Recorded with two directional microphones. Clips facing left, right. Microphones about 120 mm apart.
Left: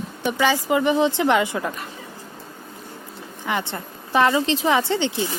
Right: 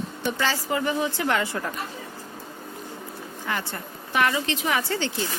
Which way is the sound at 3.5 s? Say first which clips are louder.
Left 5 dB; 20° left (ahead or behind).